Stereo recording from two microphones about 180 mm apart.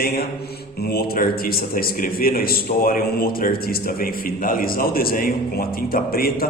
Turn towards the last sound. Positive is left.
turn(degrees=55)  # may be behind; listen again after turning